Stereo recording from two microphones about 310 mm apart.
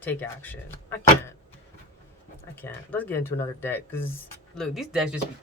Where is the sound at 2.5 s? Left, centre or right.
Centre.